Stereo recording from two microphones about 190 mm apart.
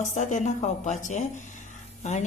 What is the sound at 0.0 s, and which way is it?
A woman's voice, 40° left (ahead or behind).